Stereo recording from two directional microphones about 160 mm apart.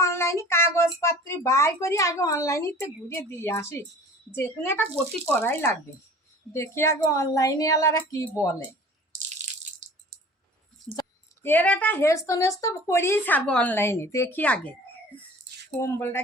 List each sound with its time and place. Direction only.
0.0 s a sound: 15° left (ahead or behind)
1.0 s a woman's voice: 20° left (ahead or behind)
9.8 s music: 50° right (ahead or behind)
11.4 s a woman's voice: 10° left (ahead or behind)